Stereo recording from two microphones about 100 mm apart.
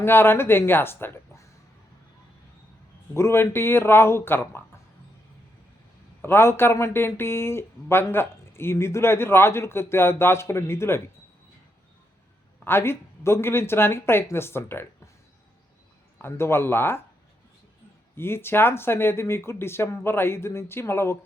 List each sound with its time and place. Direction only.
0.0 s speech: 25° left (ahead or behind)
3.2 s speech: 25° left (ahead or behind)
6.2 s speech: 25° left (ahead or behind)
12.6 s speech: 25° left (ahead or behind)
16.1 s speech: 25° left (ahead or behind)
18.2 s speech: 25° left (ahead or behind)